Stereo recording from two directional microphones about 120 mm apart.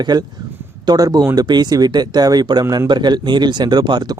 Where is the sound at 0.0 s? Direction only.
35° right (ahead or behind).